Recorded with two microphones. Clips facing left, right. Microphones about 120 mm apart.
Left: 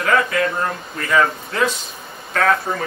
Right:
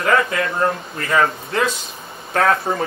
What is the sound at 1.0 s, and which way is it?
Speech, 30° right (ahead or behind).